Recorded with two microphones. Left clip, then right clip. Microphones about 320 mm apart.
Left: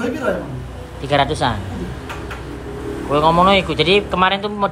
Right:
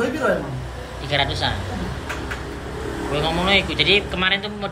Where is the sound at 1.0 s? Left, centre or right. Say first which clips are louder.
Left 5 dB; centre.